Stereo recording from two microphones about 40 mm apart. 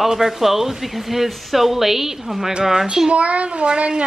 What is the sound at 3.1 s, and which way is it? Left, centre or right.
Speech, right.